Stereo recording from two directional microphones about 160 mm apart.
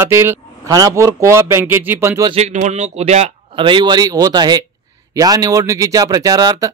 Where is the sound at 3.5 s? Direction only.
30° right (ahead or behind).